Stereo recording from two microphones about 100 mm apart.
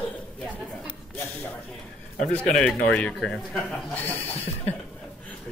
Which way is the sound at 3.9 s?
20° left (ahead or behind).